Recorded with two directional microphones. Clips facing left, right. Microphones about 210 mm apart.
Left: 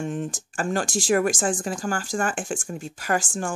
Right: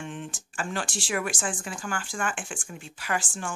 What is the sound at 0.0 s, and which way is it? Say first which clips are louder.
Speech: left 8 dB; 40° left (ahead or behind).